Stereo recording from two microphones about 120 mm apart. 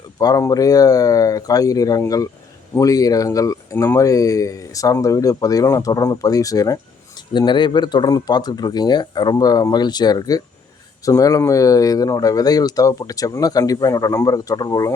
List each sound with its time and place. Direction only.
0.2 s speech: 30° left (ahead or behind)
7.3 s speech: 40° left (ahead or behind)